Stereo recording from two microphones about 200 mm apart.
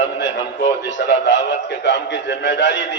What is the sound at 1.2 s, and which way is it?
A man's voice, 60° left (ahead or behind).